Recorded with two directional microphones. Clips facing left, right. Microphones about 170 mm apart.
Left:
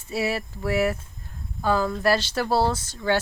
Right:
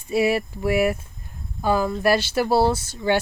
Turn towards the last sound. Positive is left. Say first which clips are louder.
# right 3 dB
turn(degrees=-15)  # may be behind; listen again after turning